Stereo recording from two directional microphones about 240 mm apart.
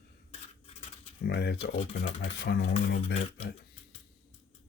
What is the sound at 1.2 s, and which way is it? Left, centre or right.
Speech, left.